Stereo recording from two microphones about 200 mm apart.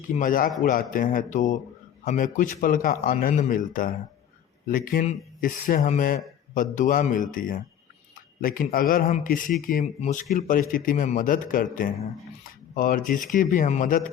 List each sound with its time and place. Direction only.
0.2 s speech: 45° left (ahead or behind)